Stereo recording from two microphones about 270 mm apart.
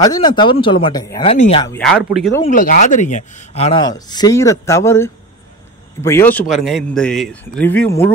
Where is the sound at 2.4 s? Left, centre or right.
Left.